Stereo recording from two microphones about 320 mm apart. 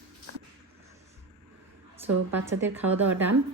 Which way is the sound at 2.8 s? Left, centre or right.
Right.